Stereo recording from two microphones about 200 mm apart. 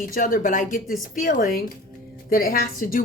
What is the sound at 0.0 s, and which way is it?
A woman's voice, 45° left (ahead or behind).